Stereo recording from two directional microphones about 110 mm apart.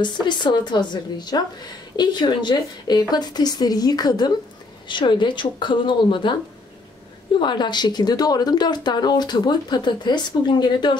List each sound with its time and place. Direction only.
0.0 s speech: 45° left (ahead or behind)
7.3 s speech: 45° left (ahead or behind)